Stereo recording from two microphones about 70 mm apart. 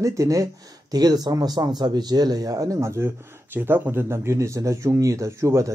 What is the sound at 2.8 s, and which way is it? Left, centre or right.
Speech, right.